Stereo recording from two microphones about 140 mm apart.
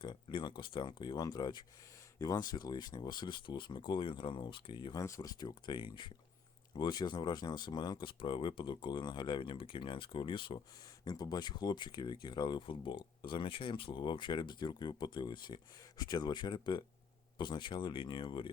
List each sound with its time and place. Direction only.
0.0 s speech: 35° left (ahead or behind)